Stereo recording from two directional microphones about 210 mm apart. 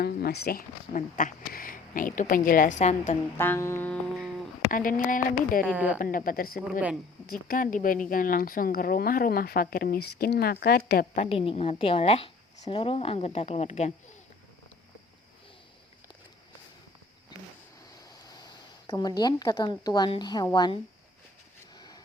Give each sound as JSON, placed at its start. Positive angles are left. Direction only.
{"t": 0.0, "sound": "speech", "side_deg": 50}
{"t": 3.3, "sound": "music", "side_deg": 10}
{"t": 4.7, "sound": "speech", "side_deg": 40}
{"t": 5.7, "sound": "speech", "side_deg": -5}
{"t": 6.0, "sound": "speech", "side_deg": 40}
{"t": 11.2, "sound": "a woman's voice", "side_deg": 25}
{"t": 18.9, "sound": "a woman's voice", "side_deg": 20}
{"t": 21.8, "sound": "a sound", "side_deg": 20}